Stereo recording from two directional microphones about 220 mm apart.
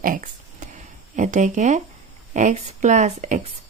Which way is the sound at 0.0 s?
35° right (ahead or behind).